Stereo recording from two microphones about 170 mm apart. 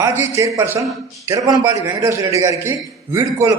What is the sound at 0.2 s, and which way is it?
A man's voice, 15° right (ahead or behind).